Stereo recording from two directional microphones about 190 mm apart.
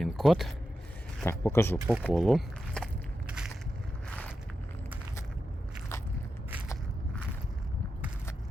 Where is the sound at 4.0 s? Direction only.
10° left (ahead or behind).